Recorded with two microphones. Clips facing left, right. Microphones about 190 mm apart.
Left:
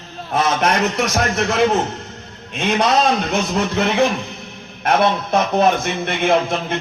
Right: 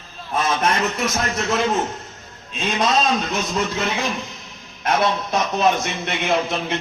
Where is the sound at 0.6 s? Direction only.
75° left (ahead or behind).